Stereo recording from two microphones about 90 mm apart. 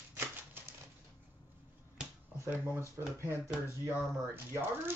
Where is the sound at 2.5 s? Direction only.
25° right (ahead or behind).